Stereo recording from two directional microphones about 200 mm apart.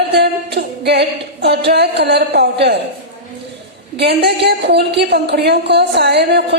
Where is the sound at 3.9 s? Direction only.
55° right (ahead or behind).